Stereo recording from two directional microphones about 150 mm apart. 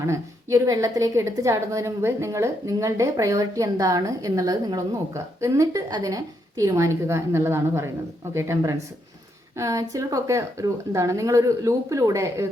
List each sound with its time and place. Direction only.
0.0 s a woman's voice: 20° right (ahead or behind)